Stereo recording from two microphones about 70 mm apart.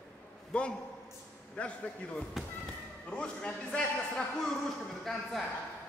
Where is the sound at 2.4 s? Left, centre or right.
Centre.